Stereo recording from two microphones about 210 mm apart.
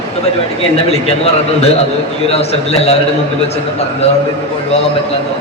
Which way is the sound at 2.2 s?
30° left (ahead or behind).